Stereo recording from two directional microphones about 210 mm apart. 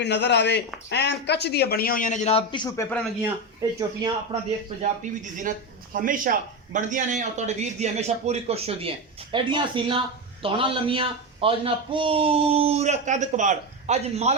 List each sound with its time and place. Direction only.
0.0 s a man's voice: 55° left (ahead or behind); by 2.8 s 20° left (ahead or behind)
2.9 s a man's voice: centre (ahead or behind)
3.6 s speech: 15° right (ahead or behind)
4.8 s a man's voice: 35° right (ahead or behind)